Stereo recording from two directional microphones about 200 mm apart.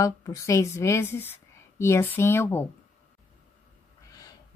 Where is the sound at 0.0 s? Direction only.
15° left (ahead or behind).